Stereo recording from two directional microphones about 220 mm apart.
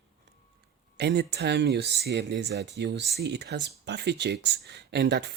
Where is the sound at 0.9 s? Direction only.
50° right (ahead or behind).